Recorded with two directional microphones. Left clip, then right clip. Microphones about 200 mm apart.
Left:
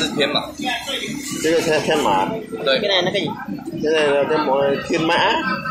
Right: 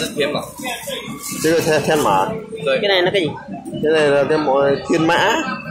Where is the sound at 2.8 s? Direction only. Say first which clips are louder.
Right 3 dB; 40° right (ahead or behind).